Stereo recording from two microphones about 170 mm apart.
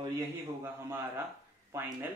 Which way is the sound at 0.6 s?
15° right (ahead or behind).